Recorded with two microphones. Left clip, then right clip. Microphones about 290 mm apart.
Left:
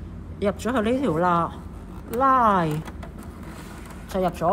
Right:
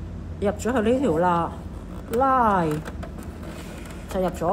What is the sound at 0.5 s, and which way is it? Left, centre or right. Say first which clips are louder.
Speech: right 1 dB; left.